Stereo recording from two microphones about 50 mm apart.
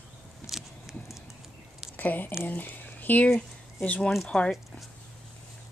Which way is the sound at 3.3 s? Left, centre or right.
Left.